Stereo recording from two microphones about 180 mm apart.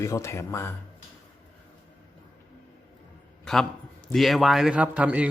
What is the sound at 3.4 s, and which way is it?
A man's voice, 5° left (ahead or behind).